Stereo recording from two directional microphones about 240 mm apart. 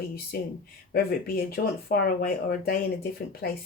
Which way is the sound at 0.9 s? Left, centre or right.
Left.